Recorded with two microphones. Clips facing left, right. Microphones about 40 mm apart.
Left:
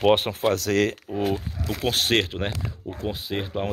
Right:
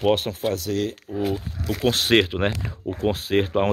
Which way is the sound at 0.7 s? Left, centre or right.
Left.